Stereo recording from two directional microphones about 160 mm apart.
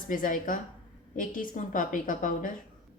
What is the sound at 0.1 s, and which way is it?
A woman's voice, 60° left (ahead or behind).